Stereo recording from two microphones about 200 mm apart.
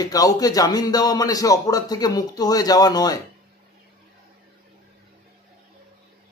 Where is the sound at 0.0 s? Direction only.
20° left (ahead or behind).